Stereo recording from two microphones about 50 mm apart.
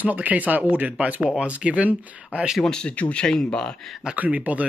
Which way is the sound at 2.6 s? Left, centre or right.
Centre.